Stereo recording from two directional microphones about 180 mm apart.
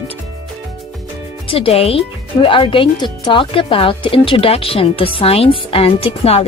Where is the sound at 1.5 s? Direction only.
30° left (ahead or behind).